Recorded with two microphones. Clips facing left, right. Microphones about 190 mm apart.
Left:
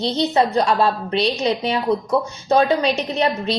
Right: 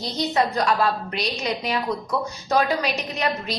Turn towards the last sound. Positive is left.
turn(degrees=30)  # may be behind; listen again after turning